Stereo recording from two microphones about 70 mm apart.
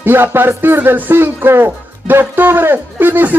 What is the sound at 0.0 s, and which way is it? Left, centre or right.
Speech, right.